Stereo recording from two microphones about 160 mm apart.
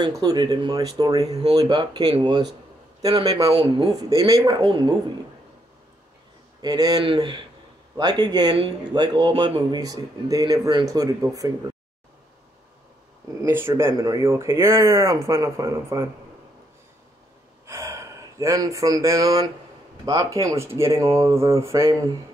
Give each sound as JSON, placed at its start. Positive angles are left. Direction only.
{"t": 0.0, "sound": "speech", "side_deg": -25}
{"t": 3.3, "sound": "speech", "side_deg": -25}
{"t": 6.6, "sound": "speech", "side_deg": -25}
{"t": 13.4, "sound": "speech", "side_deg": -15}
{"t": 17.6, "sound": "gasp", "side_deg": -20}
{"t": 20.1, "sound": "speech", "side_deg": -20}